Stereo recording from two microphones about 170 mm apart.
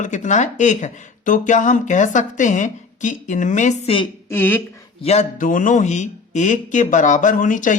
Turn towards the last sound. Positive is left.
turn(degrees=50)  # may be behind; listen again after turning